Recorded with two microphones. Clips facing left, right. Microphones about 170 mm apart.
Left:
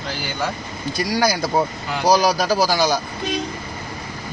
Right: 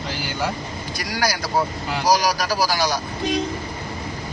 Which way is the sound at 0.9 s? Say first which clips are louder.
Left 5 dB; 25° left (ahead or behind).